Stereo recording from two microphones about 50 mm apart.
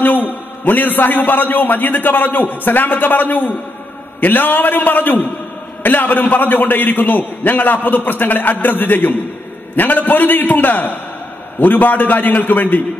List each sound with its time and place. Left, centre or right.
0.0 s a man's voice: left